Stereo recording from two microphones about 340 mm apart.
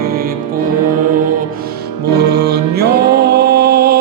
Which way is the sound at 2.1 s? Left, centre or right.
Right.